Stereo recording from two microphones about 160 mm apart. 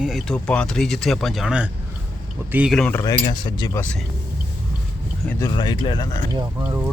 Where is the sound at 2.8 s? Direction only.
10° left (ahead or behind).